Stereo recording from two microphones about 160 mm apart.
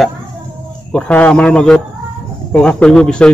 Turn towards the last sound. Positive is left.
turn(degrees=5)  # may be behind; listen again after turning